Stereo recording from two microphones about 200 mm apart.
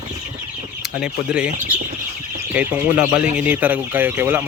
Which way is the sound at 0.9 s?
5° right (ahead or behind).